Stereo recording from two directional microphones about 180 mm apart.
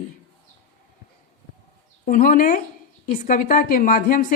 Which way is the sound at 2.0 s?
45° left (ahead or behind).